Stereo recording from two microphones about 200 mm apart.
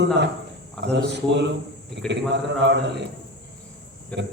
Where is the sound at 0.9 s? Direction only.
60° right (ahead or behind).